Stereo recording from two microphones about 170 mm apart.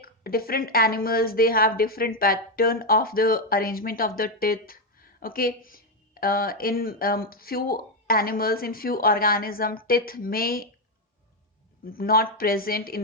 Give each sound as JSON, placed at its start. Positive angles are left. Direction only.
{"t": 0.0, "sound": "a woman's voice", "side_deg": 60}
{"t": 11.9, "sound": "a woman's voice", "side_deg": 60}